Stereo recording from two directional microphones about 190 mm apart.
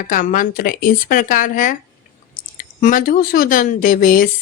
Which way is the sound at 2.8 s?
45° left (ahead or behind).